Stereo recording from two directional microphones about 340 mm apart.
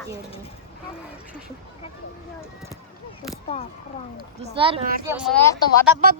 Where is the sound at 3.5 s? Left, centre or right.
Centre.